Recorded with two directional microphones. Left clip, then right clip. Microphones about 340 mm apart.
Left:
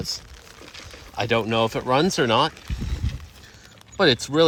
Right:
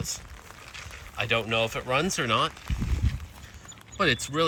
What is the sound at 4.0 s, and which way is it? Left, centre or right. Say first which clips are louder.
Speech: left 6 dB; centre.